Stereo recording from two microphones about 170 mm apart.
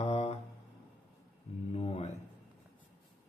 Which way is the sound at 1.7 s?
35° left (ahead or behind).